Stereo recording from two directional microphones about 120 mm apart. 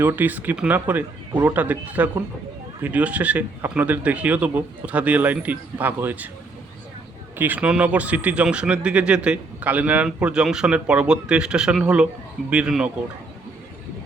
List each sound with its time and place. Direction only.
0.0 s speech: 15° right (ahead or behind)
7.3 s speech: 15° right (ahead or behind)